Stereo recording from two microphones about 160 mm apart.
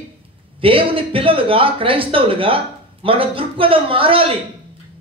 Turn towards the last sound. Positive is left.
turn(degrees=-35)  # may be behind; listen again after turning